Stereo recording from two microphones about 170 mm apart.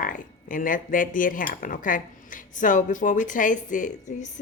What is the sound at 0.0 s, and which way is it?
Speech, 50° left (ahead or behind).